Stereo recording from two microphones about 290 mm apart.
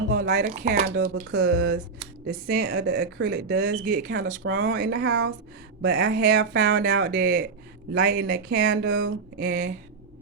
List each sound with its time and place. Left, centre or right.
0.1 s speech: right
0.9 s speech: right